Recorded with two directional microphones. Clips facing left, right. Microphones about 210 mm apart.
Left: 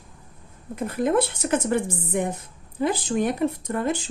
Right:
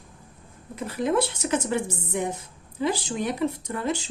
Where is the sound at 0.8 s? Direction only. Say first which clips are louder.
Left 2 dB; 55° left (ahead or behind).